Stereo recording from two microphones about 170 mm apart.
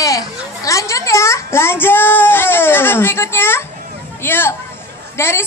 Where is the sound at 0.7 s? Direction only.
20° left (ahead or behind).